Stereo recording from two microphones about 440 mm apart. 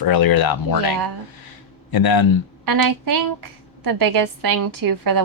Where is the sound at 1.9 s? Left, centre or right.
Left.